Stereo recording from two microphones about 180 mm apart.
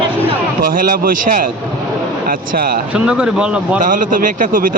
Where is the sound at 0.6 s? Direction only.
50° right (ahead or behind).